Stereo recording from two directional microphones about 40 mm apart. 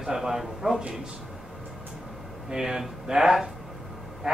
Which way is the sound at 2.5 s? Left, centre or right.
Centre.